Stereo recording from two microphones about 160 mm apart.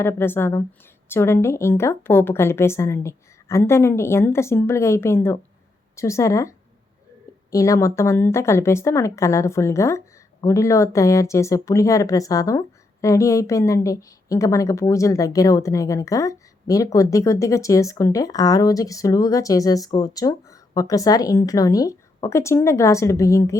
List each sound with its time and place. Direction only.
0.0 s a woman's voice: 15° left (ahead or behind)
7.5 s a woman's voice: 20° left (ahead or behind)